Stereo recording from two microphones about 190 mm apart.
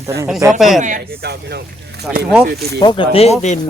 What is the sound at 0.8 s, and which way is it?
Speech, 40° right (ahead or behind).